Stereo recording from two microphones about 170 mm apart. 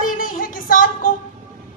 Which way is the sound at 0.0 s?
55° left (ahead or behind).